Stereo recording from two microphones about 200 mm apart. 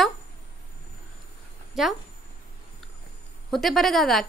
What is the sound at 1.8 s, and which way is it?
Speech, centre (ahead or behind).